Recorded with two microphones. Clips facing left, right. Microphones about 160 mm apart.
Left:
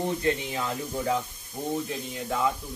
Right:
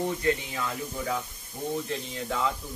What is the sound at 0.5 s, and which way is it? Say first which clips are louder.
Speech: left 2 dB; 35° left (ahead or behind).